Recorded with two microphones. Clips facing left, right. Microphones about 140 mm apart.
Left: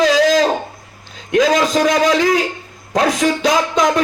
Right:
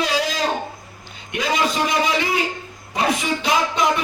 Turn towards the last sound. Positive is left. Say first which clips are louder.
# left 4 dB
turn(degrees=90)